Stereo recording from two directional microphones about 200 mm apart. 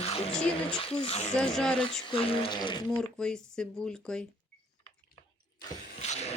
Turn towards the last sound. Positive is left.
turn(degrees=35)  # may be behind; listen again after turning